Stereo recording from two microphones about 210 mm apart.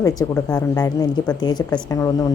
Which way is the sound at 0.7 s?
20° left (ahead or behind).